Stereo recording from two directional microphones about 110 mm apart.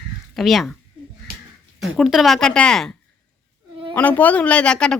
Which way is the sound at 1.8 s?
5° right (ahead or behind).